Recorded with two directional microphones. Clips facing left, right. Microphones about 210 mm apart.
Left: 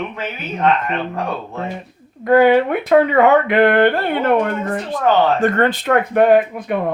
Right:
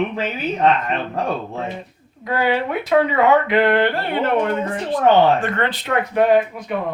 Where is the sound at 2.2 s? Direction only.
55° left (ahead or behind).